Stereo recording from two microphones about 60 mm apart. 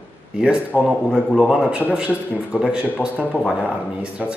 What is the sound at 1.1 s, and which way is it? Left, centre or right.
Speech, centre.